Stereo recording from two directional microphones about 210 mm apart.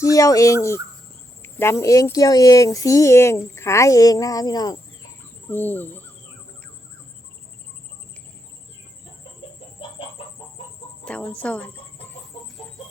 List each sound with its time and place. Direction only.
0.0 s speech: 15° left (ahead or behind)
11.0 s speech: 5° left (ahead or behind)